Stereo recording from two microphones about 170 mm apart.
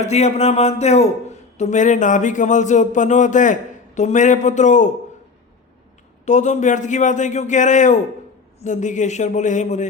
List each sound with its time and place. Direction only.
0.0 s speech: 40° left (ahead or behind)
6.2 s speech: 45° left (ahead or behind)